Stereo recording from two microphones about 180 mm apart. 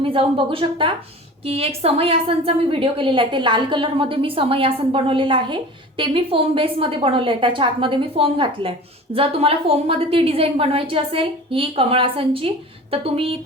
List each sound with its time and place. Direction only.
0.0 s a woman's voice: 30° right (ahead or behind)